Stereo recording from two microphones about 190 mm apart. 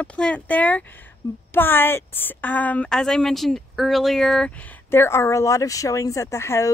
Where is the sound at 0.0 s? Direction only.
5° left (ahead or behind).